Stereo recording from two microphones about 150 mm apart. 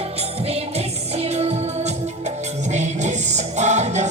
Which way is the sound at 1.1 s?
45° right (ahead or behind).